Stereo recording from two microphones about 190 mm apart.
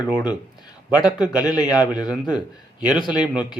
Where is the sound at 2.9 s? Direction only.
25° left (ahead or behind).